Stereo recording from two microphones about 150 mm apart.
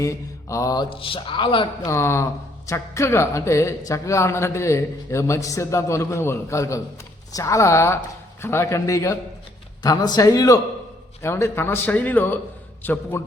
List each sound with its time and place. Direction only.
0.0 s mantra: 20° left (ahead or behind)
0.9 s a man's voice: 35° left (ahead or behind)
1.9 s a man's voice: 15° left (ahead or behind)